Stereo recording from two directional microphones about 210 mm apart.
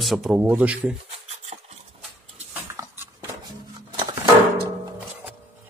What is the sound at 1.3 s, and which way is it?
Filing, 30° right (ahead or behind).